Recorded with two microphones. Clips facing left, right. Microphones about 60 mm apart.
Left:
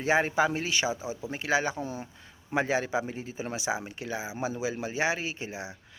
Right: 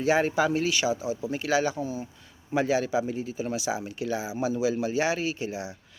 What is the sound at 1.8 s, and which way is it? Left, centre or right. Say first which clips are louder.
Speech: right 3 dB; left.